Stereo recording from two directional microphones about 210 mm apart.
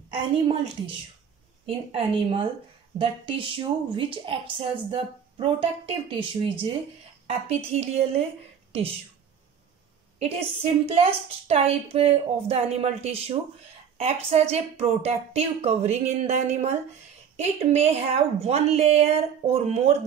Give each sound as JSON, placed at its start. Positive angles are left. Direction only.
{"t": 0.2, "sound": "a woman's voice", "side_deg": -25}
{"t": 10.1, "sound": "a woman's voice", "side_deg": -30}